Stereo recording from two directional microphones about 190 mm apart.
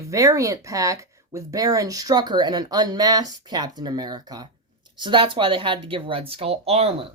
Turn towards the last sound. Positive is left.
turn(degrees=-30)  # may be behind; listen again after turning